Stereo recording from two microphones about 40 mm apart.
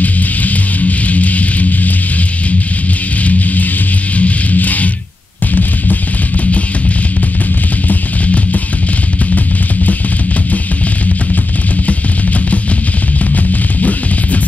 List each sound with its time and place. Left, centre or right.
0.0 s music: left
3.3 s music: left
7.9 s music: left
13.3 s music: left